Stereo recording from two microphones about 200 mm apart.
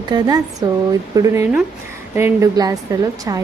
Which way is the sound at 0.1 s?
20° right (ahead or behind).